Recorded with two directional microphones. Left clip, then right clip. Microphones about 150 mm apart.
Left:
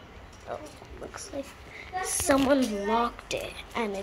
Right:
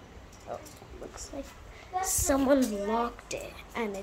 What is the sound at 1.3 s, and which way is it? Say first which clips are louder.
Speech: left 5 dB; 5° right (ahead or behind).